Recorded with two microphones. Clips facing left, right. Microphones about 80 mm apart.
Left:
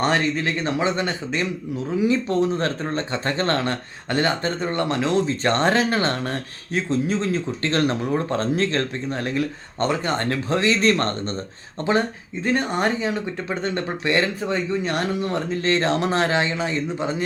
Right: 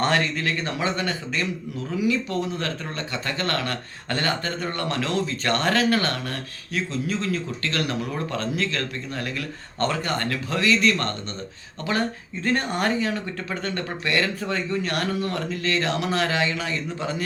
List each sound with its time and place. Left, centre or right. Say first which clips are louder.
0.0 s speech: left 2 dB; left
11.9 s speech: left 4 dB; left